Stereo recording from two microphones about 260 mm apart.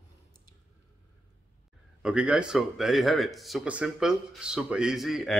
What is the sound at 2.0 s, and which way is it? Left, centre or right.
Speech, centre.